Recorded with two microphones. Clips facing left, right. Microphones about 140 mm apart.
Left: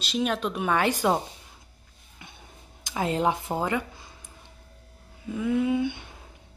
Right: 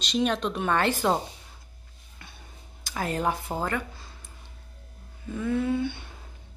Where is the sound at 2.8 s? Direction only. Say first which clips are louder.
Left 3 dB; 20° left (ahead or behind).